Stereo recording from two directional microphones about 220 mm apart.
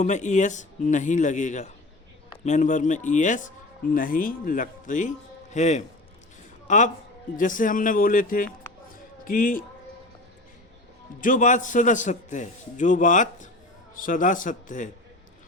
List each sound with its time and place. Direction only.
0.0 s a man's voice: 35° left (ahead or behind)
11.2 s a man's voice: 35° left (ahead or behind)